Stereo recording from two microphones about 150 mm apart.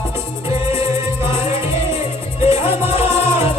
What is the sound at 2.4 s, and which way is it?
Music, 40° left (ahead or behind).